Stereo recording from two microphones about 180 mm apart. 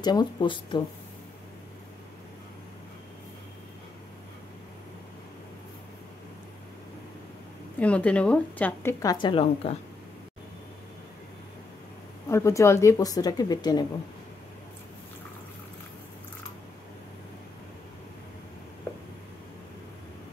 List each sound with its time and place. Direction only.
0.0 s speech: 25° left (ahead or behind)
7.8 s a woman's voice: 5° left (ahead or behind)
9.0 s speech: 25° left (ahead or behind)
12.3 s speech: 15° left (ahead or behind)